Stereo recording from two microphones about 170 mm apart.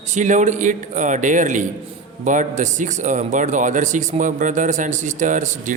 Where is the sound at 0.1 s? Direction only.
45° right (ahead or behind).